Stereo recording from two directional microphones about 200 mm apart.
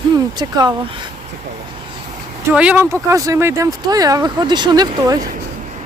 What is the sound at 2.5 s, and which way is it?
Speech, 5° right (ahead or behind).